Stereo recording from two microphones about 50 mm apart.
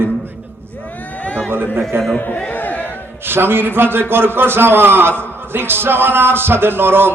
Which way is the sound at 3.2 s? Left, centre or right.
Right.